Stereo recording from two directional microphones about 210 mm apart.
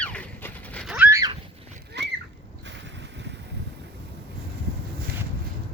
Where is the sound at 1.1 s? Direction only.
15° right (ahead or behind).